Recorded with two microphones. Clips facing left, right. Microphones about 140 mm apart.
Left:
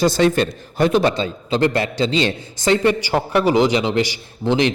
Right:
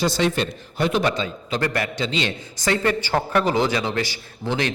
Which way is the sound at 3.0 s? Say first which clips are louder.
Left 3 dB; 15° left (ahead or behind).